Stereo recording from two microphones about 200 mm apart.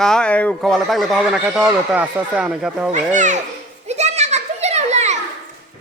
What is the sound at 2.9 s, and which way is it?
Speech, 40° right (ahead or behind).